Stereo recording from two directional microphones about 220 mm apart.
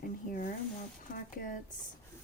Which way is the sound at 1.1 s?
40° left (ahead or behind).